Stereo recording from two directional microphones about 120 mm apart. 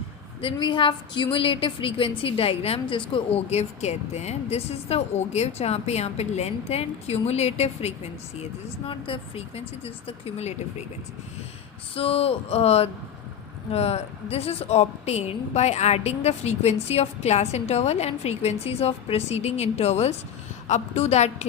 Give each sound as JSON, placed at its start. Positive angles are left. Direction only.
{"t": 0.4, "sound": "a woman's voice", "side_deg": 45}
{"t": 8.9, "sound": "a woman's voice", "side_deg": 50}
{"t": 11.9, "sound": "a woman's voice", "side_deg": 50}